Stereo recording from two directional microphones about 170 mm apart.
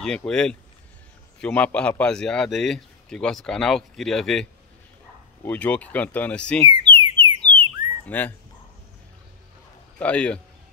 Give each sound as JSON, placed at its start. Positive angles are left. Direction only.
{"t": 0.0, "sound": "a man's voice", "side_deg": 5}
{"t": 6.6, "sound": "alarm", "side_deg": -30}
{"t": 7.4, "sound": "bird", "side_deg": 10}
{"t": 9.9, "sound": "speech", "side_deg": 5}